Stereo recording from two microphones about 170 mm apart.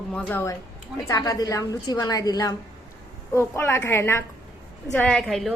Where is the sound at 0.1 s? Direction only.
10° left (ahead or behind).